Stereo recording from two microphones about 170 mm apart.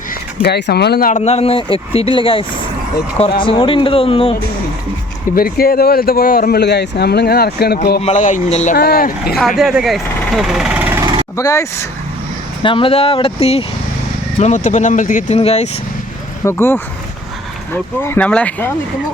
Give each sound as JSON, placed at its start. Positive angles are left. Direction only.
{"t": 0.4, "sound": "speech", "side_deg": 75}
{"t": 1.1, "sound": "speech", "side_deg": 40}
{"t": 3.4, "sound": "speech", "side_deg": 30}
{"t": 5.3, "sound": "speech", "side_deg": 60}
{"t": 8.0, "sound": "speech", "side_deg": 45}
{"t": 8.7, "sound": "speech", "side_deg": 65}
{"t": 9.6, "sound": "speech", "side_deg": 0}
{"t": 11.0, "sound": "vehicle", "side_deg": -30}
{"t": 11.3, "sound": "speech", "side_deg": 15}
{"t": 12.6, "sound": "speech", "side_deg": 30}
{"t": 14.3, "sound": "speech", "side_deg": 45}
{"t": 15.4, "sound": "speech", "side_deg": 40}
{"t": 16.4, "sound": "speech", "side_deg": 15}
{"t": 18.0, "sound": "speech", "side_deg": 10}